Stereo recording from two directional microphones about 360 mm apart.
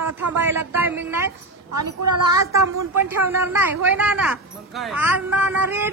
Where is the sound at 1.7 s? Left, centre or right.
Right.